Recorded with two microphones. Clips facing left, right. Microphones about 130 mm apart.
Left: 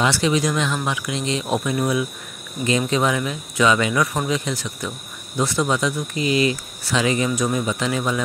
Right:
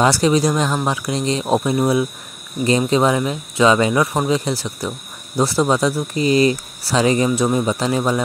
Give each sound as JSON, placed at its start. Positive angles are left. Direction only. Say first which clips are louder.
{"t": 0.0, "sound": "speech", "louder": "right 4 dB", "side_deg": -40}